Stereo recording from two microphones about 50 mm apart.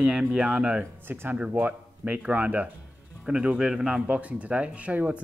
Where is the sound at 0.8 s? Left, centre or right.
Right.